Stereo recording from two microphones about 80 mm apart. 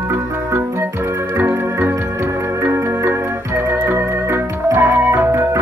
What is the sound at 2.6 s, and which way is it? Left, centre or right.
Organ, right.